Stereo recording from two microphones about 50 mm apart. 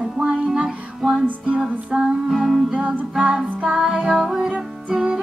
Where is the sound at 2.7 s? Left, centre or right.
Right.